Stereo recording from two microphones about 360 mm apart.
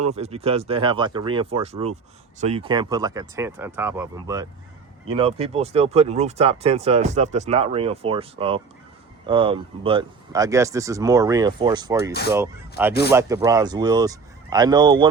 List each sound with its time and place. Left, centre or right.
0.0 s speech: centre